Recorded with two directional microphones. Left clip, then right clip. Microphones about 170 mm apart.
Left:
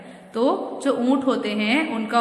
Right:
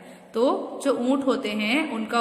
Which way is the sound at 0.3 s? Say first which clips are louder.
Left 1 dB; 20° right (ahead or behind).